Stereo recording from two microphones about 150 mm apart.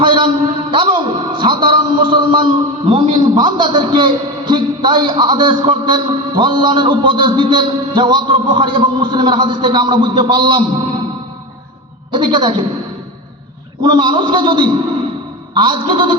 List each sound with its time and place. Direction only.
0.0 s a man's voice: 35° right (ahead or behind)
12.1 s a man's voice: 30° right (ahead or behind)
13.8 s a man's voice: 35° right (ahead or behind)